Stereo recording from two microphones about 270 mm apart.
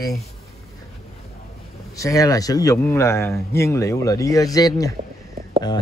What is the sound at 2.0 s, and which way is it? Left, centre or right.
Speech, centre.